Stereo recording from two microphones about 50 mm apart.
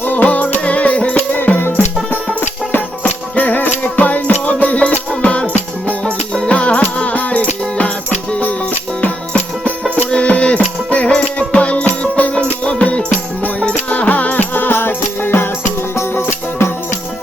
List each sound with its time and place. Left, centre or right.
0.0 s music: left
3.0 s music: left
4.6 s music: left
6.1 s music: centre
6.5 s music: left
16.0 s music: left